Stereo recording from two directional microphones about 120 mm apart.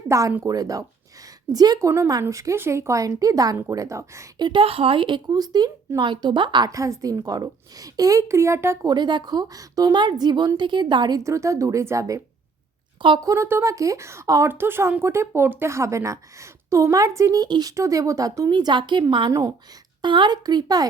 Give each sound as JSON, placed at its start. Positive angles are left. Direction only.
{"t": 0.1, "sound": "speech", "side_deg": -25}
{"t": 4.4, "sound": "speech", "side_deg": -45}
{"t": 8.9, "sound": "speech", "side_deg": -35}
{"t": 11.2, "sound": "speech", "side_deg": -25}
{"t": 13.2, "sound": "speech", "side_deg": -25}
{"t": 19.3, "sound": "speech", "side_deg": -25}
{"t": 20.0, "sound": "speech", "side_deg": -40}